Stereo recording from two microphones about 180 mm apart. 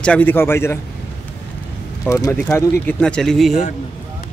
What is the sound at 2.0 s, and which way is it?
Speech, 15° left (ahead or behind).